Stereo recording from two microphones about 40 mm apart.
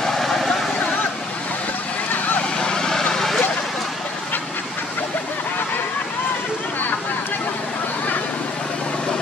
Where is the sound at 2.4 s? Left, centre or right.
Left.